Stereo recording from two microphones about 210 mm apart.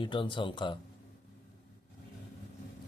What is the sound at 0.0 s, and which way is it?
Speech, 25° left (ahead or behind).